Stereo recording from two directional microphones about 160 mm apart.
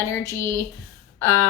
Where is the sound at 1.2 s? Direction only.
15° left (ahead or behind).